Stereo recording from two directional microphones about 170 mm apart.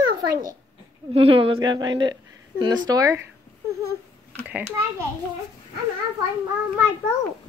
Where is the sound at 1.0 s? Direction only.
35° right (ahead or behind).